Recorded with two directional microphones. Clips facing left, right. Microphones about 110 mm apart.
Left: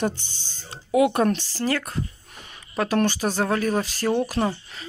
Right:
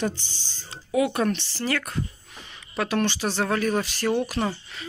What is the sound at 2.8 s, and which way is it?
Speech, 40° left (ahead or behind).